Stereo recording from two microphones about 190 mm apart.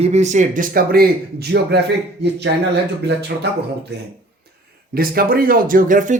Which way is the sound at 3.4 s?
60° right (ahead or behind).